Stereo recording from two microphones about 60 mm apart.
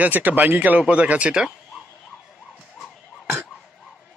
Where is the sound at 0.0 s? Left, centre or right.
Right.